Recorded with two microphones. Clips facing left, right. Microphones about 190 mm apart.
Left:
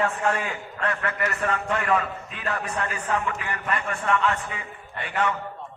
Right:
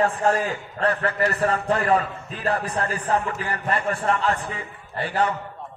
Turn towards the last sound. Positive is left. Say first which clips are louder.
# right 3 dB
turn(degrees=-35)  # may be behind; listen again after turning